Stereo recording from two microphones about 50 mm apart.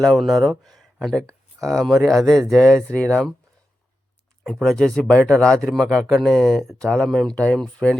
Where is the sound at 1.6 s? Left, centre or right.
Centre.